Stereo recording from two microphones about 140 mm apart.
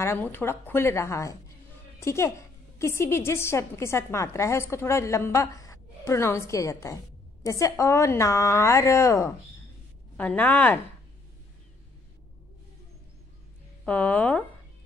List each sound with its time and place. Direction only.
0.0 s a woman's voice: 15° left (ahead or behind)
10.1 s a woman's voice: 10° left (ahead or behind)
13.8 s a woman's voice: 10° left (ahead or behind)